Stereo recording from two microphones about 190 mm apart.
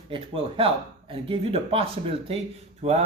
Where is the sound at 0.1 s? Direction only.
30° right (ahead or behind).